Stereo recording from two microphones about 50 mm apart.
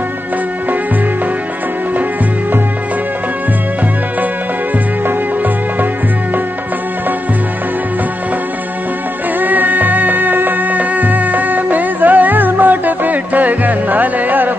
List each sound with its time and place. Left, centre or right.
9.4 s music: right